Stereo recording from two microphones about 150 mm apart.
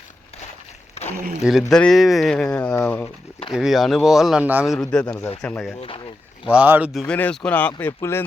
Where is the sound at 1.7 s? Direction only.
5° left (ahead or behind).